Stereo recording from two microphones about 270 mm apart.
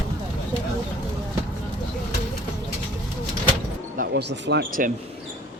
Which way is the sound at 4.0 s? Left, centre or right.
Right.